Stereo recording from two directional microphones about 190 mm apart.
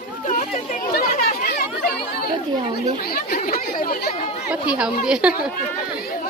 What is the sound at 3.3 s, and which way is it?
Chatter, 45° left (ahead or behind).